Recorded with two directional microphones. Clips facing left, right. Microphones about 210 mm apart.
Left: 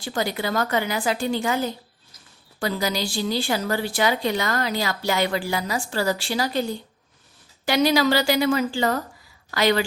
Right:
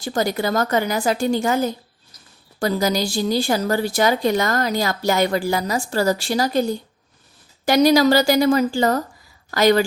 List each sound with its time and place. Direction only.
0.0 s a woman's voice: 40° right (ahead or behind)